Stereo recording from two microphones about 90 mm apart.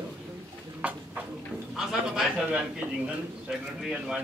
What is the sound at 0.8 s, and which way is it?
A man's voice, 15° right (ahead or behind).